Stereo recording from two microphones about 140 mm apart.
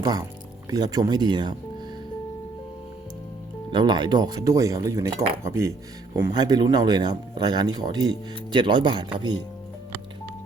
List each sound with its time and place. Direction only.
0.0 s speech: 30° right (ahead or behind)
3.7 s speech: 30° right (ahead or behind)